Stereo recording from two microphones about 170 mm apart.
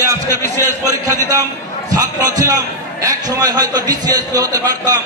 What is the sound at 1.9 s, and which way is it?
A man's voice, 20° right (ahead or behind).